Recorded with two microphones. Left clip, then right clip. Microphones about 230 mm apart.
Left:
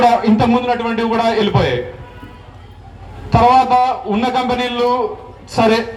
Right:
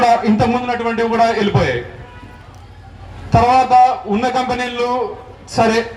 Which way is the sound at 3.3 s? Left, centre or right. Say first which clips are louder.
Even; right.